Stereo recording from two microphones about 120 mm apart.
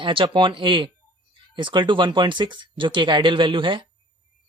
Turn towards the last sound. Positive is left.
turn(degrees=-45)  # may be behind; listen again after turning